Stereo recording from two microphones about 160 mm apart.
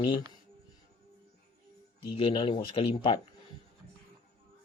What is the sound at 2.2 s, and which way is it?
Speech, 30° left (ahead or behind).